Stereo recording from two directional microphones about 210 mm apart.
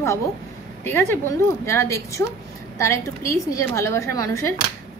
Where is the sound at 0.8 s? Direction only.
10° left (ahead or behind).